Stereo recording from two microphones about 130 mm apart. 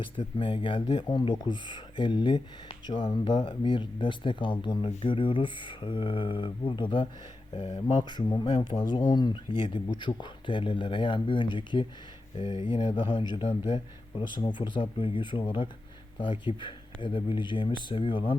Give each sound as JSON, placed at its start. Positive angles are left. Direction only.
{"t": 0.0, "sound": "speech", "side_deg": 40}
{"t": 7.9, "sound": "speech", "side_deg": 35}